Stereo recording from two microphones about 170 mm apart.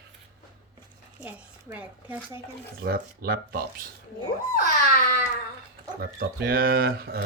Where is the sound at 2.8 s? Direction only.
60° right (ahead or behind).